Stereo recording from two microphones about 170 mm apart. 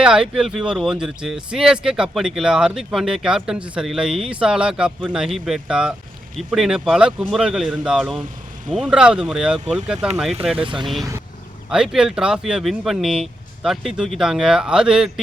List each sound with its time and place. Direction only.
0.0 s speech: 5° right (ahead or behind)
10.6 s speech: 30° right (ahead or behind)
11.7 s speech: 5° right (ahead or behind)